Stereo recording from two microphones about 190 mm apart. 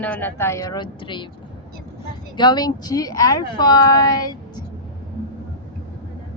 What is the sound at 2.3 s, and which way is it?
Speech, 20° left (ahead or behind).